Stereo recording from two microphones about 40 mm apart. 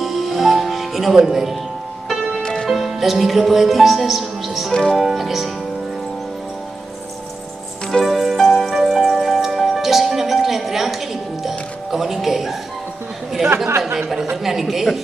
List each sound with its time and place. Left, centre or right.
0.0 s music: centre
2.4 s music: centre
2.7 s speech: centre
8.0 s music: centre
14.3 s speech: centre